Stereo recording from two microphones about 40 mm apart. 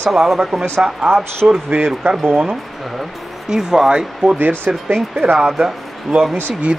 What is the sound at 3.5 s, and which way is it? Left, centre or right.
Speech, centre.